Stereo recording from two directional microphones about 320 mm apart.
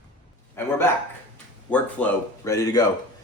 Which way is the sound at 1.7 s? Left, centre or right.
Centre.